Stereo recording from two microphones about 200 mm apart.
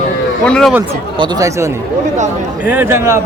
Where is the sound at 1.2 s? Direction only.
15° right (ahead or behind).